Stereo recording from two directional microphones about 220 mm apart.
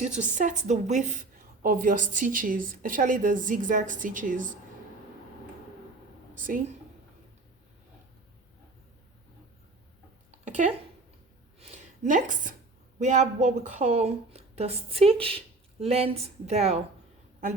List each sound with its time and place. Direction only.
0.2 s a woman's voice: 35° right (ahead or behind)
10.4 s a sound: 35° right (ahead or behind)
13.0 s speech: 30° right (ahead or behind)